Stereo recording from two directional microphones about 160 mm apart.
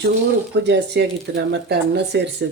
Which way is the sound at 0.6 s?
90° right.